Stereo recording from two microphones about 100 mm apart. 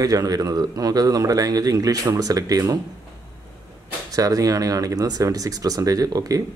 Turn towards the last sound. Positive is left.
turn(degrees=-35)  # may be behind; listen again after turning